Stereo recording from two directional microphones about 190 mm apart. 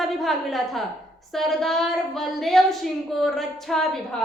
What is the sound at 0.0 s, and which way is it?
A woman's voice, centre (ahead or behind).